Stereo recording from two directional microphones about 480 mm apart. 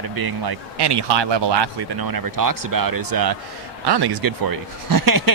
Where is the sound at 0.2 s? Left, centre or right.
Right.